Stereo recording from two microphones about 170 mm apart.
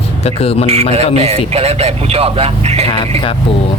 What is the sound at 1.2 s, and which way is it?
A man's voice, 35° right (ahead or behind).